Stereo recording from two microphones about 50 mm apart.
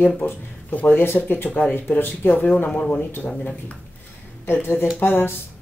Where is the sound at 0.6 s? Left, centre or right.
Left.